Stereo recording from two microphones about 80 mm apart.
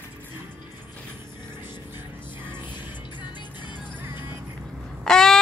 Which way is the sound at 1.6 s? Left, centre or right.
Right.